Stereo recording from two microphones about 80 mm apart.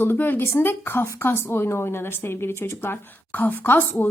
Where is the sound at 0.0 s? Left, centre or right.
Left.